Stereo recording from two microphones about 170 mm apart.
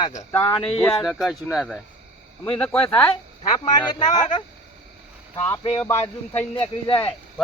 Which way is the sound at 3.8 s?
25° left (ahead or behind).